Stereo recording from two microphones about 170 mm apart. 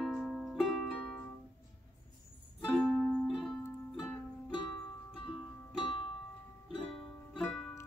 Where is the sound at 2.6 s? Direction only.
Centre (ahead or behind).